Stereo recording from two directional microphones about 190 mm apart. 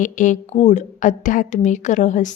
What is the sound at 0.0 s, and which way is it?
A woman's voice, 40° left (ahead or behind).